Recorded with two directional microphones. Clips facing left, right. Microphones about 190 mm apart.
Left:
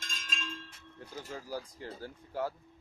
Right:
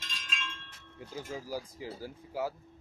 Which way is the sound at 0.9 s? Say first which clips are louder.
Right 3 dB; 10° right (ahead or behind).